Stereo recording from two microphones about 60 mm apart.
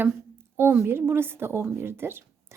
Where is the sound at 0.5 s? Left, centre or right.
Right.